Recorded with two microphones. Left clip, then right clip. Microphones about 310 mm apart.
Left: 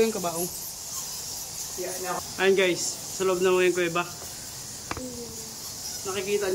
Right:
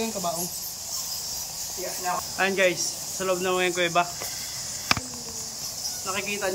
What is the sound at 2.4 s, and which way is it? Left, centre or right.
Speech, centre.